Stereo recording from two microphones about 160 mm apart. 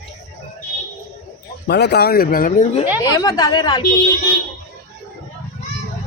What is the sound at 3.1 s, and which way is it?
Speech, 25° left (ahead or behind).